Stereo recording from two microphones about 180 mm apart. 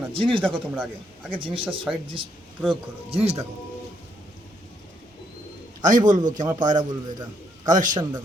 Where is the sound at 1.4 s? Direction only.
30° right (ahead or behind).